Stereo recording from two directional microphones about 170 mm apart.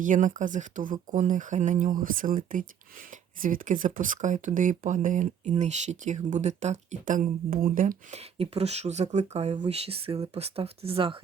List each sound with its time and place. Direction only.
0.0 s speech: 50° right (ahead or behind)
8.4 s speech: 40° right (ahead or behind)